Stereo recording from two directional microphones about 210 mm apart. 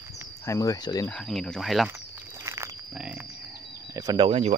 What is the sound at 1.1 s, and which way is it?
Speech, centre (ahead or behind).